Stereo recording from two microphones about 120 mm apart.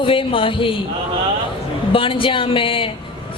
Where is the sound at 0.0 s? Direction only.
45° left (ahead or behind).